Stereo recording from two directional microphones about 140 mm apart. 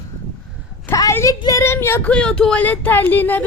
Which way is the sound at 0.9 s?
20° left (ahead or behind).